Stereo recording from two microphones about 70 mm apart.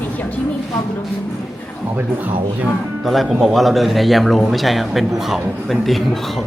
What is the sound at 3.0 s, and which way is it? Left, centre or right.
A man's voice, centre.